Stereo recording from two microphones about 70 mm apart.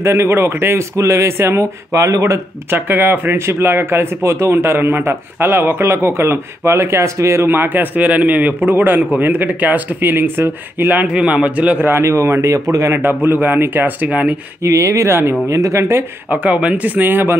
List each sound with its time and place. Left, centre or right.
0.0 s speech: right
2.7 s speech: right
7.4 s speech: right
11.1 s speech: centre
12.0 s speech: right
13.2 s speech: right
14.0 s speech: centre
14.6 s speech: right
15.4 s speech: right
16.3 s speech: centre